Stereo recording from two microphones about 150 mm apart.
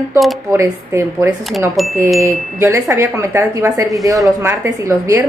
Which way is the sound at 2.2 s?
20° right (ahead or behind).